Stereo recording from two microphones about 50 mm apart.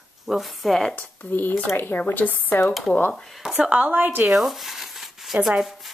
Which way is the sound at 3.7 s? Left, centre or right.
Right.